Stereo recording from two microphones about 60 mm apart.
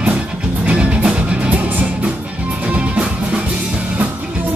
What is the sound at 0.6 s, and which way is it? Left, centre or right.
Music, centre.